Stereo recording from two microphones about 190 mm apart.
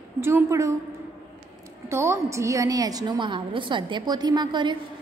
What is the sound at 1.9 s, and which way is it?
A woman's voice, 15° right (ahead or behind).